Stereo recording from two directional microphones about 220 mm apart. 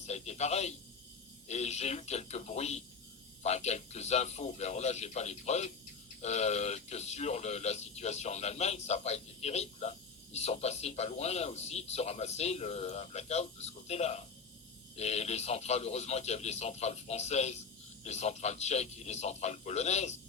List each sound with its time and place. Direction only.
0.0 s a man's voice: 30° left (ahead or behind)